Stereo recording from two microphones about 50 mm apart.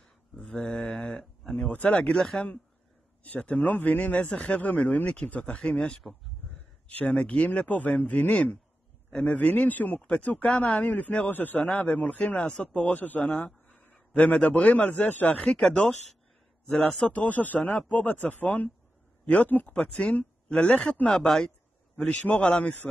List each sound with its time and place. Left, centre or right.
0.5 s a sound: centre
1.9 s speech: centre
3.3 s a man's voice: left
7.0 s speech: left
10.0 s a man's voice: left
13.5 s a sound: centre
14.1 s a man's voice: left
15.6 s a man's voice: centre
17.0 s a man's voice: left; by 21.5 s centre
22.2 s a man's voice: left